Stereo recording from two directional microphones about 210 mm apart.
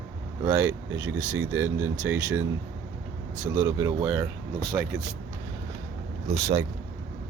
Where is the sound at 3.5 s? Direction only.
15° right (ahead or behind).